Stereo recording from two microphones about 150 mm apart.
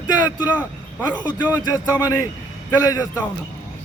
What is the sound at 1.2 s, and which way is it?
Speech, 30° left (ahead or behind).